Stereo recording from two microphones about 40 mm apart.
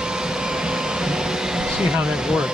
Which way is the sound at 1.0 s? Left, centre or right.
Centre.